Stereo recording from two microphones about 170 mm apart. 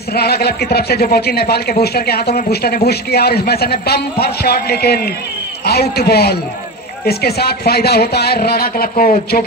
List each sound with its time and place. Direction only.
0.1 s a man's voice: 70° left (ahead or behind)